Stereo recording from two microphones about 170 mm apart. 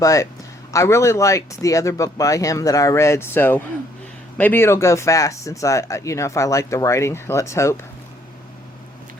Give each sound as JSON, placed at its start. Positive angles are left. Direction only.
{"t": 0.0, "sound": "speech", "side_deg": 20}